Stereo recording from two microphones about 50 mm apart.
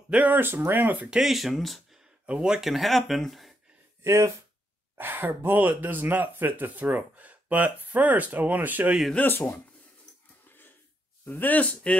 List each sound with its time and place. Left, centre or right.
0.1 s speech: right
0.4 s speech: right
1.1 s speech: centre
2.2 s speech: centre
2.7 s speech: centre
4.0 s speech: right
4.9 s speech: right
9.2 s speech: left
11.2 s speech: left